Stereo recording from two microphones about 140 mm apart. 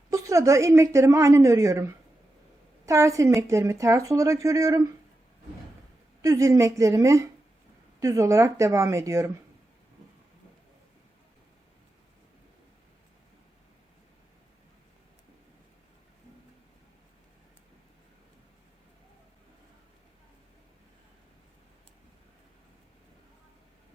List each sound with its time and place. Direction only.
0.1 s speech: 25° right (ahead or behind)
6.2 s speech: 25° right (ahead or behind)